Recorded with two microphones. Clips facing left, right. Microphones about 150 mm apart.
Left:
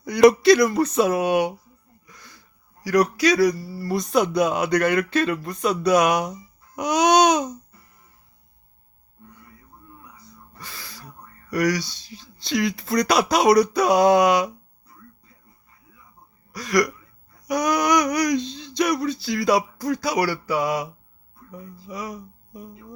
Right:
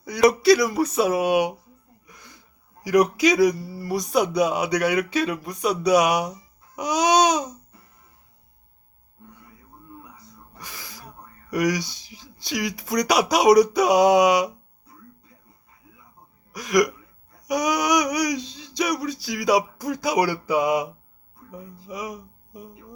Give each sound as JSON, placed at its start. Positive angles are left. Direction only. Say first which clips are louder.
{"t": 0.0, "sound": "a man's voice", "louder": "left 4 dB", "side_deg": -5}
{"t": 2.0, "sound": "wheeze", "louder": "even", "side_deg": -20}
{"t": 2.8, "sound": "a man's voice", "louder": "right 1 dB", "side_deg": -15}
{"t": 6.7, "sound": "babbling", "louder": "left 2 dB", "side_deg": -5}
{"t": 10.6, "sound": "sneeze", "louder": "even", "side_deg": -15}
{"t": 11.5, "sound": "a man's voice", "louder": "left 1 dB", "side_deg": -15}
{"t": 16.5, "sound": "a man's voice", "louder": "right 1 dB", "side_deg": -15}